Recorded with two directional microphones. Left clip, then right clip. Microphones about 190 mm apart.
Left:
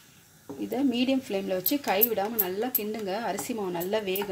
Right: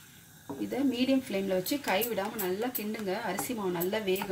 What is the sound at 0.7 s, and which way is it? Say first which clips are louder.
Speech: left 2 dB; 35° left (ahead or behind).